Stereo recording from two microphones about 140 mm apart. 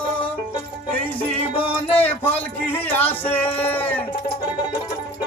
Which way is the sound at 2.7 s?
15° left (ahead or behind).